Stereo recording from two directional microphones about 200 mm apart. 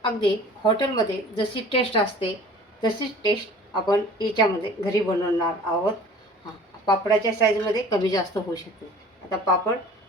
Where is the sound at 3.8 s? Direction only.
20° left (ahead or behind).